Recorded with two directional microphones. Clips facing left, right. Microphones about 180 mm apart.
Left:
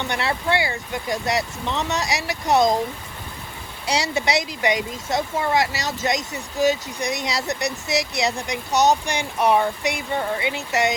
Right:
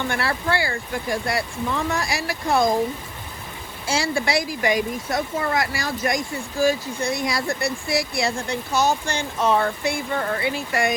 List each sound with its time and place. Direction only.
0.1 s speech: 20° left (ahead or behind)
3.8 s speech: 20° left (ahead or behind)